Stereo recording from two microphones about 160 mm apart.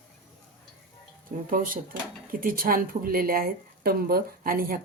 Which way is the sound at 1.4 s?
60° right (ahead or behind).